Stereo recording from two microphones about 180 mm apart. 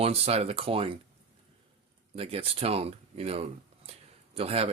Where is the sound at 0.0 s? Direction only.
35° right (ahead or behind).